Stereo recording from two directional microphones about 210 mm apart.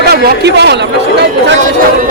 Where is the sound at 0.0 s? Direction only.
55° right (ahead or behind).